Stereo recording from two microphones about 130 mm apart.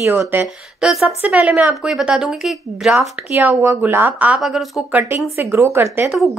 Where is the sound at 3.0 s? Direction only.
15° right (ahead or behind).